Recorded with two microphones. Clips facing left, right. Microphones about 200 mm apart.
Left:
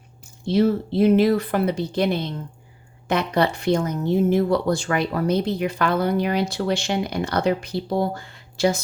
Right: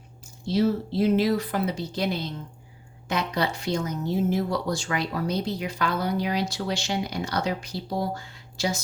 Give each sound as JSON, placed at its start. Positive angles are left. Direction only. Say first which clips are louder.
{"t": 0.4, "sound": "speech", "louder": "left 4 dB", "side_deg": 55}